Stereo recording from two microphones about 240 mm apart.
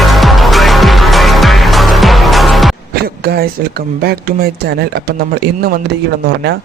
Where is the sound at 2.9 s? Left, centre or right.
Right.